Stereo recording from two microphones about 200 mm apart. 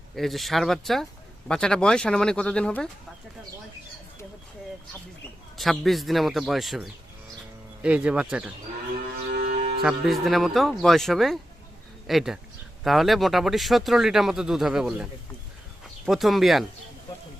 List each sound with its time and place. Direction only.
0.2 s speech: centre (ahead or behind)
5.5 s speech: centre (ahead or behind)
9.4 s music: 40° right (ahead or behind)
9.8 s speech: centre (ahead or behind)